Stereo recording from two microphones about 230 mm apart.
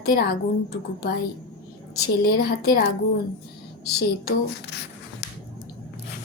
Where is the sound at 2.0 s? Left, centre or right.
Left.